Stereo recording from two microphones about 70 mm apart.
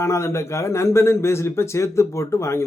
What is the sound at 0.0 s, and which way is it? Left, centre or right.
Speech, left.